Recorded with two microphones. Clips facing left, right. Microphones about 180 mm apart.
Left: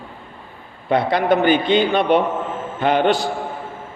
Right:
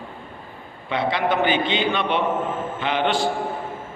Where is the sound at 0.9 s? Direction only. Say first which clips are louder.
Left 5 dB; 45° left (ahead or behind).